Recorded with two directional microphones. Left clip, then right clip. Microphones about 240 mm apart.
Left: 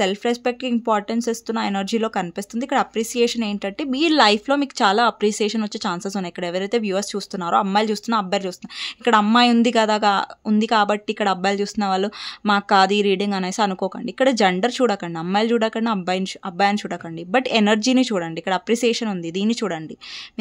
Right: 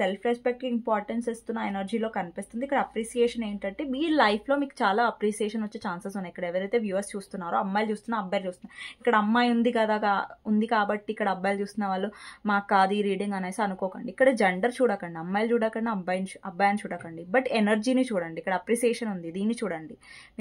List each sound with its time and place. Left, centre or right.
0.0 s speech: left